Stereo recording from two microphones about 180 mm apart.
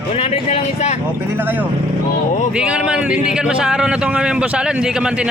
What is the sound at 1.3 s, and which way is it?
A man's voice, 10° right (ahead or behind).